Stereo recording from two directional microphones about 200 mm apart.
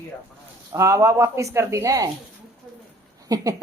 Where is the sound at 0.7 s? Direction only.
15° right (ahead or behind).